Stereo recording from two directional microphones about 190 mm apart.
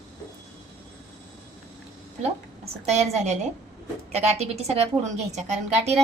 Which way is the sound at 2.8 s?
35° right (ahead or behind).